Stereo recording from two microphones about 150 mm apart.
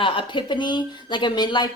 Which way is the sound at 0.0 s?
35° left (ahead or behind).